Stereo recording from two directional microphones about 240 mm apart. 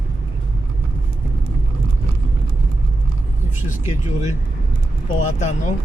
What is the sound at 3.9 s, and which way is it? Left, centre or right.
Speech, left.